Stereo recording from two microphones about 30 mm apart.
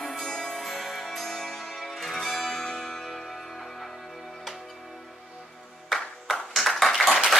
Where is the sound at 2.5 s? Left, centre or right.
Centre.